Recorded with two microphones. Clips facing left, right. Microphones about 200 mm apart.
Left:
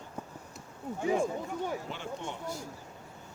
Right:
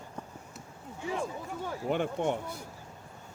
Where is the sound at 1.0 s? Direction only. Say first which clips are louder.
Left 6 dB; 50° left (ahead or behind).